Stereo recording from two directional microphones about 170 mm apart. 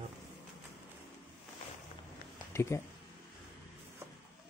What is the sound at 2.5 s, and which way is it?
Speech, 15° left (ahead or behind).